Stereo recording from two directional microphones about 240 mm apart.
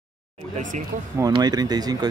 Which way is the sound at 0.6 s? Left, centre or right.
Right.